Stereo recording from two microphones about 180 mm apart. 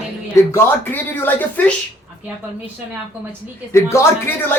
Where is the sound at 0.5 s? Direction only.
10° left (ahead or behind).